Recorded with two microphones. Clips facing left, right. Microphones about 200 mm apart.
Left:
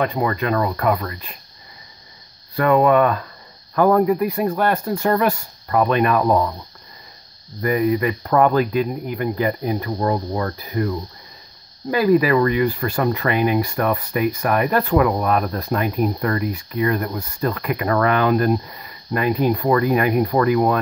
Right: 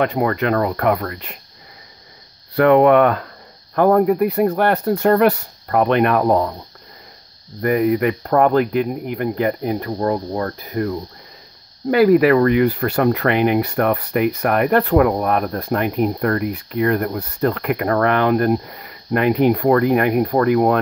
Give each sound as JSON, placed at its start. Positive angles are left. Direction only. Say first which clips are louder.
{"t": 0.0, "sound": "speech", "louder": "right 3 dB", "side_deg": -65}
{"t": 2.5, "sound": "speech", "louder": "right 4 dB", "side_deg": -70}
{"t": 3.7, "sound": "speech", "louder": "right 1 dB", "side_deg": -55}
{"t": 7.6, "sound": "speech", "louder": "right 2 dB", "side_deg": -60}
{"t": 9.8, "sound": "speech", "louder": "right 1 dB", "side_deg": -40}
{"t": 11.9, "sound": "speech", "louder": "right 4 dB", "side_deg": -65}